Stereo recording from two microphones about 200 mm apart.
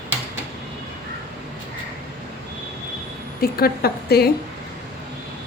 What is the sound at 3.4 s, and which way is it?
Speech, 50° left (ahead or behind).